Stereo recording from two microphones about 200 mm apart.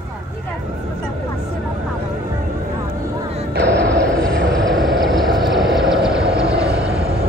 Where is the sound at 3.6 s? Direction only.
60° right (ahead or behind).